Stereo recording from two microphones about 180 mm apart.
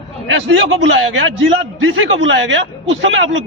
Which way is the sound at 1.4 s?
90° right.